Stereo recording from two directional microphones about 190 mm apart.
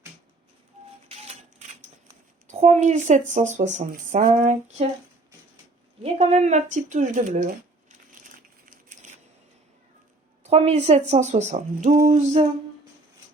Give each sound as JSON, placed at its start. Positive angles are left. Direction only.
{"t": 1.0, "sound": "a sound", "side_deg": -35}
{"t": 2.5, "sound": "speech", "side_deg": -35}
{"t": 6.0, "sound": "speech", "side_deg": -35}
{"t": 8.6, "sound": "crushing", "side_deg": -45}
{"t": 10.4, "sound": "speech", "side_deg": -35}